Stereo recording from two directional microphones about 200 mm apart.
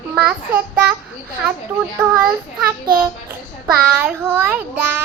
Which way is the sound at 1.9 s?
10° right (ahead or behind).